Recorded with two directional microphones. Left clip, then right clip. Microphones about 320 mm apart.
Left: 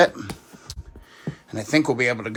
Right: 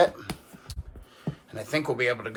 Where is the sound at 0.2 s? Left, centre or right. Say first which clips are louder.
Left 3 dB; left.